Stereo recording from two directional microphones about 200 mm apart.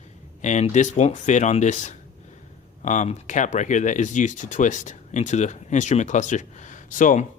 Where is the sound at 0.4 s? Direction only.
35° left (ahead or behind).